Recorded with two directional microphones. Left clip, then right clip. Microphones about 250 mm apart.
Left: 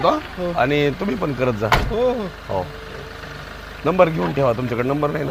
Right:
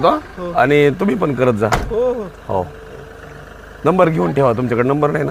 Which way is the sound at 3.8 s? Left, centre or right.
Right.